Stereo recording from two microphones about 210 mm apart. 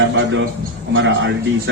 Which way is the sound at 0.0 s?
60° right (ahead or behind).